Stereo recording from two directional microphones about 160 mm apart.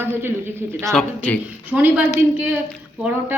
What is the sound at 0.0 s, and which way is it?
Speech, 15° right (ahead or behind).